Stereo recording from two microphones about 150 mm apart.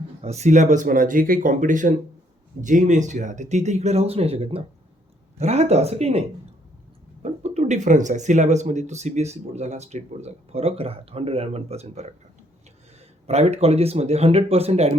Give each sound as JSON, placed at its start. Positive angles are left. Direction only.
{"t": 0.2, "sound": "speech", "side_deg": -45}
{"t": 13.2, "sound": "speech", "side_deg": -45}